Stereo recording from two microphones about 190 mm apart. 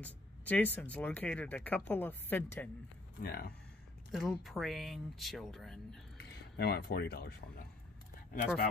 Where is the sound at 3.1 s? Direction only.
55° left (ahead or behind).